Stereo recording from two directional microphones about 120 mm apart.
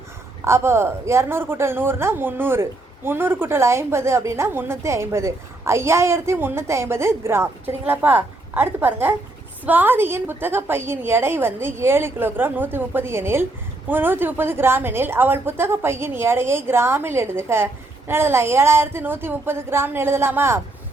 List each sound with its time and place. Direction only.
0.4 s a woman's voice: 20° right (ahead or behind)